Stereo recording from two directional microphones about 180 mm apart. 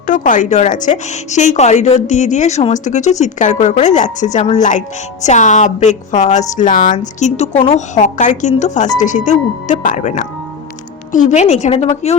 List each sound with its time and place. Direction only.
0.1 s a woman's voice: 45° left (ahead or behind)